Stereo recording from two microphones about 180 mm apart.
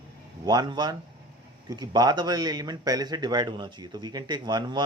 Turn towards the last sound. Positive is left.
turn(degrees=-25)  # may be behind; listen again after turning